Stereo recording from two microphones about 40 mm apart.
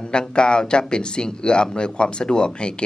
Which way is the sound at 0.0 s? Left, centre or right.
Left.